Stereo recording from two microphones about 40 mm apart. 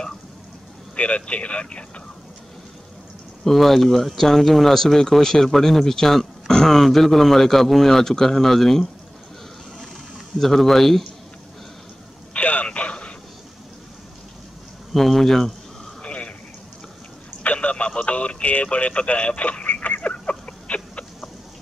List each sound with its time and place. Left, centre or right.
0.9 s speech: left
3.4 s speech: centre
10.4 s speech: centre
12.4 s radio: left
14.9 s speech: centre
16.0 s a sound: left
17.4 s a sound: left